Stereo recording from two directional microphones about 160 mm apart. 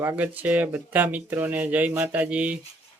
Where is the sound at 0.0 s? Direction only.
10° right (ahead or behind).